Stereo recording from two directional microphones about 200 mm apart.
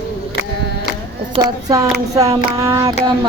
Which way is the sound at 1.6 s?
15° right (ahead or behind).